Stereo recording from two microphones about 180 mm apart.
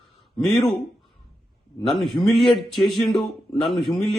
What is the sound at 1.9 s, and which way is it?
A man's voice, centre (ahead or behind).